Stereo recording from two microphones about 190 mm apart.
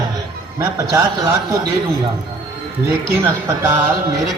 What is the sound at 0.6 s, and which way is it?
A man's voice, 15° right (ahead or behind).